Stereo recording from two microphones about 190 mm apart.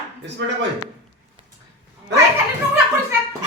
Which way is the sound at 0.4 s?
70° right (ahead or behind).